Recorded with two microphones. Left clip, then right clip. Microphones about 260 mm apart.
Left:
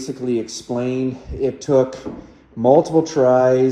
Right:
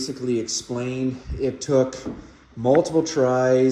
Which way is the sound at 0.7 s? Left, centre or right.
Left.